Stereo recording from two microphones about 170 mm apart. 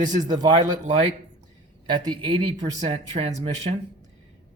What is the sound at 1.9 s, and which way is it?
Speech, 25° right (ahead or behind).